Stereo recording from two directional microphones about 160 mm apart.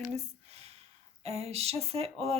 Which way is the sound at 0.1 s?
45° right (ahead or behind).